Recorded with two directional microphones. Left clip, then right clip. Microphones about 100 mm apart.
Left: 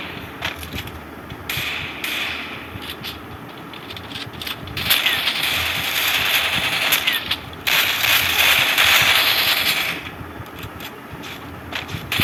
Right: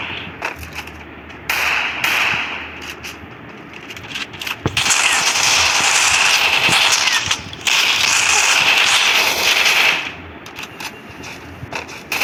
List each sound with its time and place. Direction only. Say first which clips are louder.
0.0 s skateboard: right 3 dB; 20° left (ahead or behind)
1.5 s hammer: right 8 dB; 15° left (ahead or behind)
4.2 s a sound: right 8 dB; 10° left (ahead or behind)
11.7 s vehicle: right 1 dB; 15° left (ahead or behind)